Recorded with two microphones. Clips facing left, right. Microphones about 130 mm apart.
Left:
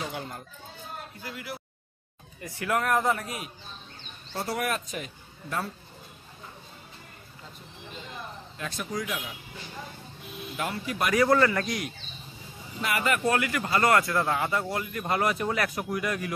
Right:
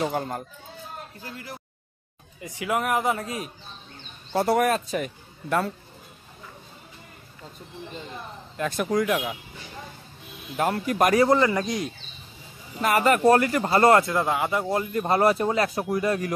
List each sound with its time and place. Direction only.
0.0 s speech: 45° right (ahead or behind)
2.4 s speech: 15° right (ahead or behind)
3.2 s speech: 25° right (ahead or behind)
4.3 s speech: 55° right (ahead or behind)
4.6 s speech: 35° right (ahead or behind)
5.0 s speech: 70° right (ahead or behind)
8.5 s speech: 55° right (ahead or behind)
10.6 s speech: 45° right (ahead or behind)
11.1 s speech: 20° right (ahead or behind)
12.8 s speech: 40° right (ahead or behind); by 14.8 s 15° right (ahead or behind)
14.8 s speech: 30° right (ahead or behind)